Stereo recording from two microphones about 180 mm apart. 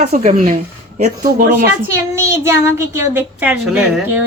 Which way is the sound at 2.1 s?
15° right (ahead or behind).